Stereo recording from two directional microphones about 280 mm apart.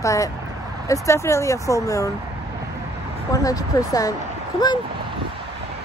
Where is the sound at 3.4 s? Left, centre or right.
Centre.